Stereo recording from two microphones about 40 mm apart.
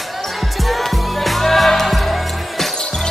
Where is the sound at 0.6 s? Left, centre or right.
Centre.